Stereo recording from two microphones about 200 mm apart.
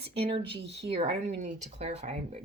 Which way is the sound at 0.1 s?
25° right (ahead or behind).